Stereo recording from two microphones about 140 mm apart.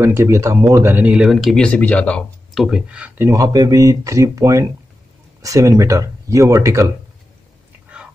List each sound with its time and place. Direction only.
0.0 s speech: 20° right (ahead or behind)
3.3 s speech: 25° right (ahead or behind)
7.9 s whispering: 10° right (ahead or behind)